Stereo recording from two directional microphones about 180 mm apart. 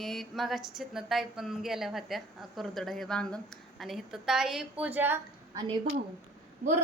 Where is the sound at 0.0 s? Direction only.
Centre (ahead or behind).